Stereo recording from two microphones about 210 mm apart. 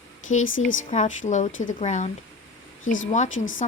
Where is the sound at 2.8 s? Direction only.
65° left (ahead or behind).